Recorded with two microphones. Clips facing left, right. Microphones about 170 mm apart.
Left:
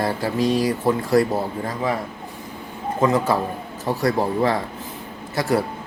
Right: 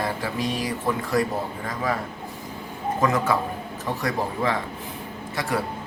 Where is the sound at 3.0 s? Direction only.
30° left (ahead or behind).